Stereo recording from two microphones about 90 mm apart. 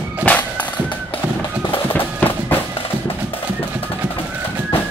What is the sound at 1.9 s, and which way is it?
Music, 20° left (ahead or behind).